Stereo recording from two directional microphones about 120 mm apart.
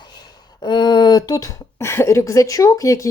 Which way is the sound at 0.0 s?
35° left (ahead or behind).